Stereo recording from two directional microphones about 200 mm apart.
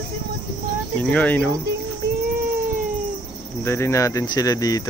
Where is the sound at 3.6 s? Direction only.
15° left (ahead or behind).